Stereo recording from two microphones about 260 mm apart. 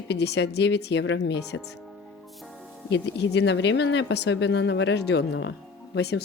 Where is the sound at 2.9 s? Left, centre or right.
Left.